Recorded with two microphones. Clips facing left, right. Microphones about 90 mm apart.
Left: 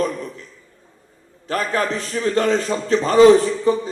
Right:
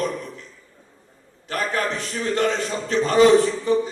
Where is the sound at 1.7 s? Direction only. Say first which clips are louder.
Left 3 dB; 35° left (ahead or behind).